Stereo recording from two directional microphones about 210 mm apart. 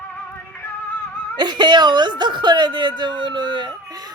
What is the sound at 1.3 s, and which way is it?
A woman's voice, 20° right (ahead or behind).